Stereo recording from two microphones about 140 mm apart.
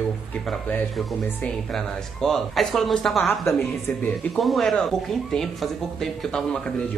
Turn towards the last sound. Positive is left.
turn(degrees=5)  # may be behind; listen again after turning